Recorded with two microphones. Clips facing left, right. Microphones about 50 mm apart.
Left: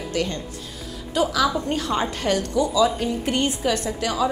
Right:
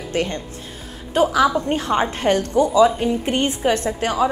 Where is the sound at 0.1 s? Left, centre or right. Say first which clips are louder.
Right 4 dB; right.